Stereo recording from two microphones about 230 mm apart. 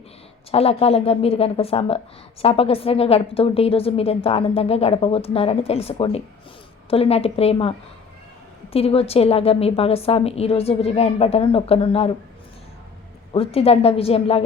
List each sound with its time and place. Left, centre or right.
0.5 s a woman's voice: left
13.3 s a woman's voice: left